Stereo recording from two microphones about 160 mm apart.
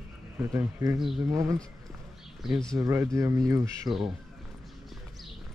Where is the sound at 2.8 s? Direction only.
15° right (ahead or behind).